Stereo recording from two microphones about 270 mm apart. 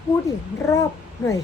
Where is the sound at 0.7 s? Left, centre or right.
Centre.